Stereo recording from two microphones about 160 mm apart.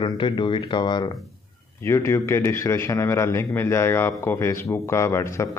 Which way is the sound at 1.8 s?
15° left (ahead or behind).